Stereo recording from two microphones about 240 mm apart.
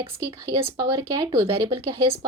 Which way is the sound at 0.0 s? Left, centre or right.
Centre.